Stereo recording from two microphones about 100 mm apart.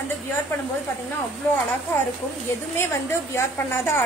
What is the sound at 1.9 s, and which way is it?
A woman's voice, 20° left (ahead or behind).